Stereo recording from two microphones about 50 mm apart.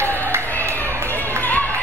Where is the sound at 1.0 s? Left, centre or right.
Left.